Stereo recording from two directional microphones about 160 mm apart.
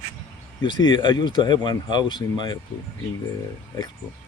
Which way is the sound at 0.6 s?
30° left (ahead or behind).